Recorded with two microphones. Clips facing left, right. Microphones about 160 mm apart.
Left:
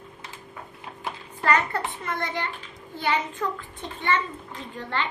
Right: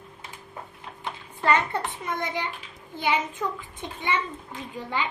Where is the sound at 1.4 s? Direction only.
25° right (ahead or behind).